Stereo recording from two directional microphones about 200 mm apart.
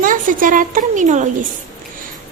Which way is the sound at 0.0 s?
45° right (ahead or behind).